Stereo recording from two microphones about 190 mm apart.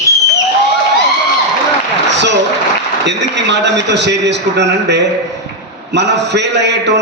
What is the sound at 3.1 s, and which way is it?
A man's voice, 65° right (ahead or behind).